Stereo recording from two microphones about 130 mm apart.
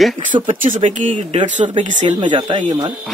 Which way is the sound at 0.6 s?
75° right (ahead or behind).